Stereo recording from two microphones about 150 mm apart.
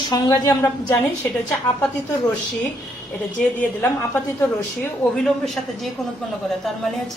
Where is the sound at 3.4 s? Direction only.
15° left (ahead or behind).